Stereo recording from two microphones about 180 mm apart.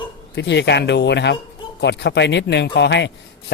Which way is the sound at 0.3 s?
75° left (ahead or behind).